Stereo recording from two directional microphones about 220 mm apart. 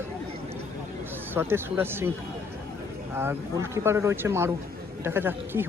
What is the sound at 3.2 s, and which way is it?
A man's voice, 10° right (ahead or behind).